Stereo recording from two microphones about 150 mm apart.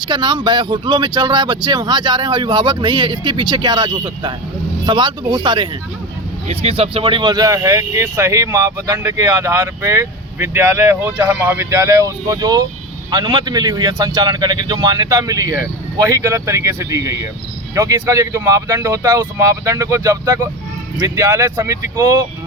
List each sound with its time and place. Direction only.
0.0 s speech: 30° right (ahead or behind)
6.5 s speech: 40° right (ahead or behind); by 22.3 s 25° right (ahead or behind)